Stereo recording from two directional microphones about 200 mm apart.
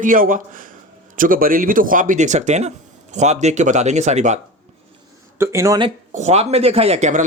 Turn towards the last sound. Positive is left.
turn(degrees=-35)  # may be behind; listen again after turning